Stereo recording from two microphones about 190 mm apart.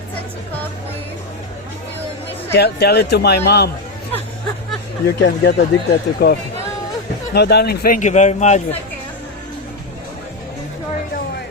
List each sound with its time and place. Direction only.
2.5 s speech: 60° left (ahead or behind)
5.0 s speech: 65° left (ahead or behind)
7.3 s a man's voice: 60° left (ahead or behind); by 8.6 s 35° left (ahead or behind)